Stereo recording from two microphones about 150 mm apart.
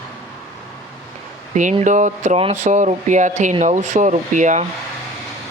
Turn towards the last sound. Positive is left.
turn(degrees=-55)  # may be behind; listen again after turning